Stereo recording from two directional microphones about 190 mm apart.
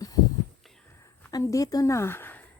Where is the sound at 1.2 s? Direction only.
15° left (ahead or behind).